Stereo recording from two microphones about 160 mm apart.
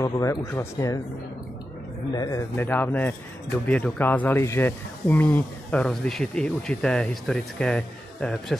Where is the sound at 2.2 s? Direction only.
20° left (ahead or behind).